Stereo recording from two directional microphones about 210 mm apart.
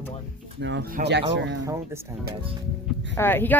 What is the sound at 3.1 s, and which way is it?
Speech, 10° left (ahead or behind).